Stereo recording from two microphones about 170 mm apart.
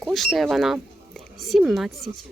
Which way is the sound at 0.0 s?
Centre (ahead or behind).